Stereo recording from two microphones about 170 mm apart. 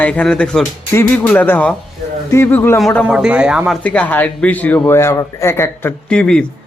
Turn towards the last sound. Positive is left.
turn(degrees=5)  # may be behind; listen again after turning